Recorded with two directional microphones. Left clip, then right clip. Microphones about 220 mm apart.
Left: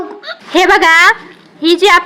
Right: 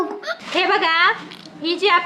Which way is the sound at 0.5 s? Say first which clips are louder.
Left 10 dB; 45° left (ahead or behind).